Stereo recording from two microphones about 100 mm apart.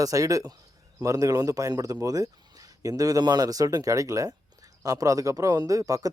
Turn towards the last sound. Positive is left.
turn(degrees=-35)  # may be behind; listen again after turning